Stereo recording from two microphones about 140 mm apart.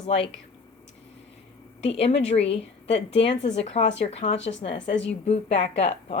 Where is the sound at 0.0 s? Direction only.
50° left (ahead or behind).